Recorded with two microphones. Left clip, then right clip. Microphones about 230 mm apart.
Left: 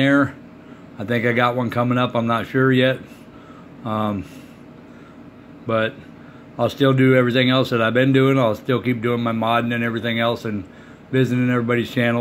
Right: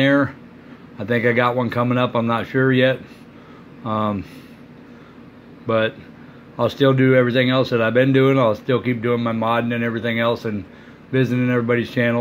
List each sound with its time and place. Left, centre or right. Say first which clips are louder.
0.0 s speech: even; centre
5.7 s speech: right 2 dB; centre